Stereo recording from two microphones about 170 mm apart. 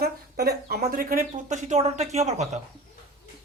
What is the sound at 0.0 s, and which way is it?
Speech, 65° right (ahead or behind).